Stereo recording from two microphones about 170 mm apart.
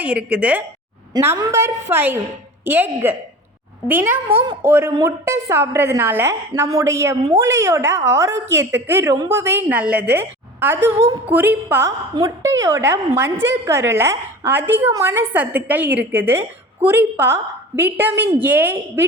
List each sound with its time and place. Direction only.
0.0 s a woman's voice: 5° right (ahead or behind)
1.1 s a woman's voice: 20° right (ahead or behind)